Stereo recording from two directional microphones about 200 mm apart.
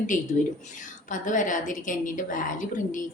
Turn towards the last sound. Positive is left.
turn(degrees=40)  # may be behind; listen again after turning